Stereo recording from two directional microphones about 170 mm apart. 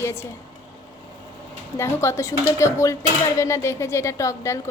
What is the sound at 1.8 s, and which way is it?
Speech, 15° left (ahead or behind).